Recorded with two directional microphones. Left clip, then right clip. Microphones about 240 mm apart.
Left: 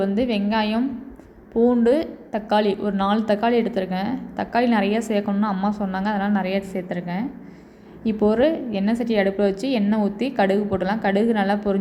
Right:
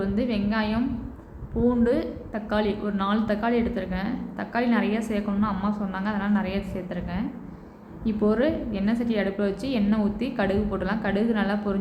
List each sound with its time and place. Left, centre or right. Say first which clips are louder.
0.0 s a woman's voice: left 5 dB; left